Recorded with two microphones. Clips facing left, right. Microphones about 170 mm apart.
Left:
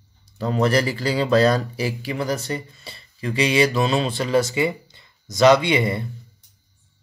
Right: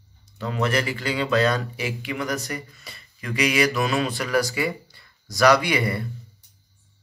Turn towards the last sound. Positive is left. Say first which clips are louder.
# left 3 dB
turn(degrees=20)  # may be behind; listen again after turning